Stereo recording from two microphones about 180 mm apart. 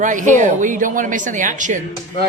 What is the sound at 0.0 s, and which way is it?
A man's voice, 45° right (ahead or behind).